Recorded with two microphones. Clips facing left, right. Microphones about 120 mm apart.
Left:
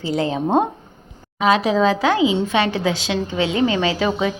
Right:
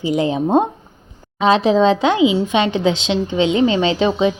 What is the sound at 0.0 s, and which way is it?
Speech, 15° right (ahead or behind).